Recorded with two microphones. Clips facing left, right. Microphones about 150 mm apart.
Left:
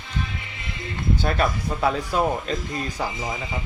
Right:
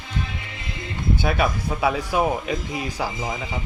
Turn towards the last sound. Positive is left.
turn(degrees=-5)  # may be behind; listen again after turning